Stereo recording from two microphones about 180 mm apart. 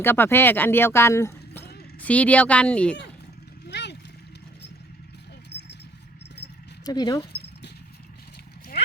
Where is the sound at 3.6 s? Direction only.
70° left (ahead or behind).